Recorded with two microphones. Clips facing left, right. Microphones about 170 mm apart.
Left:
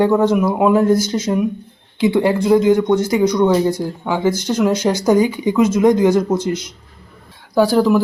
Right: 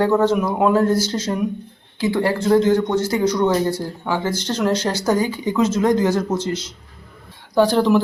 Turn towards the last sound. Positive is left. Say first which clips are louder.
# left 2 dB
turn(degrees=5)  # may be behind; listen again after turning